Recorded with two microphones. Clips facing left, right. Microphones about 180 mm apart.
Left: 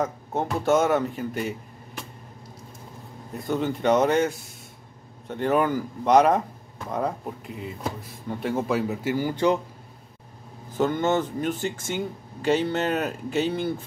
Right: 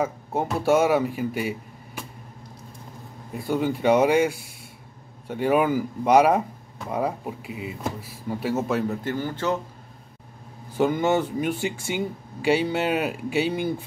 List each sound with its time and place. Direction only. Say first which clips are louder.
0.0 s speech: right 1 dB; 10° right (ahead or behind)
3.4 s speech: right 2 dB; 10° right (ahead or behind); by 9.6 s 15° left (ahead or behind)
10.8 s speech: right 1 dB; 10° right (ahead or behind)